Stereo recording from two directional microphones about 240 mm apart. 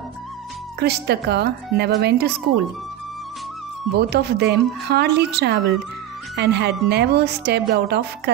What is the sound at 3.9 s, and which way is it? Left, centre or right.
A woman's voice, right.